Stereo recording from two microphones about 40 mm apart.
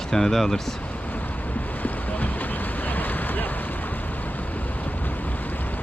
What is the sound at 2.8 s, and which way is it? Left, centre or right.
Vehicle, left.